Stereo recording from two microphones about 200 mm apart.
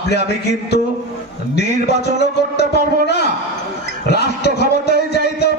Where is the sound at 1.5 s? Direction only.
55° left (ahead or behind).